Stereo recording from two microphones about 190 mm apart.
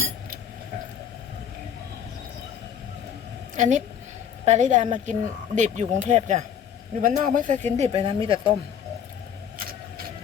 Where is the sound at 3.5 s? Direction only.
40° right (ahead or behind).